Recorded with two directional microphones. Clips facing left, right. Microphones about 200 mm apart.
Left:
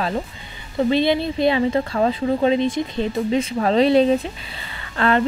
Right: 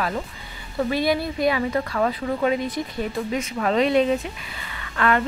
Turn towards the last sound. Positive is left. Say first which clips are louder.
# left 3 dB
turn(degrees=30)  # may be behind; listen again after turning